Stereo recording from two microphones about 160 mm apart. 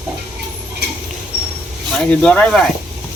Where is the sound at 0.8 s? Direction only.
90° right.